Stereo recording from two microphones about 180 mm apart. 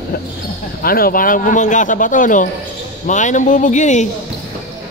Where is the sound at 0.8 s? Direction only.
55° left (ahead or behind).